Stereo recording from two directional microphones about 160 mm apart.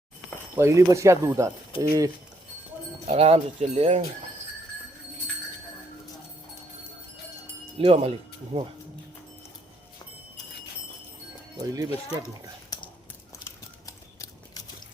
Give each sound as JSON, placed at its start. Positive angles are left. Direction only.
{"t": 0.5, "sound": "speech", "side_deg": -20}
{"t": 3.1, "sound": "speech", "side_deg": -40}
{"t": 7.8, "sound": "speech", "side_deg": -40}
{"t": 11.6, "sound": "speech", "side_deg": -20}
{"t": 12.7, "sound": "a sound", "side_deg": 25}